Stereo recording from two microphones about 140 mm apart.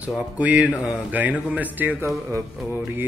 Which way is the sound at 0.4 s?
10° right (ahead or behind).